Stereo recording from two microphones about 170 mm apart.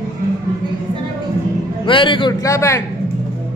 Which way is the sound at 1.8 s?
30° left (ahead or behind).